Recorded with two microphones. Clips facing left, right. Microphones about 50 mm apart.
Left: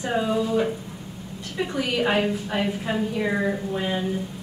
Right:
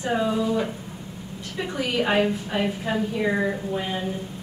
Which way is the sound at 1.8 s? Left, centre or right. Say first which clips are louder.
Right 1 dB; centre.